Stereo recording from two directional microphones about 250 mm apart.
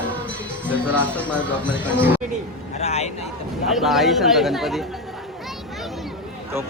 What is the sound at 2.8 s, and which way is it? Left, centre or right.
Speech, left.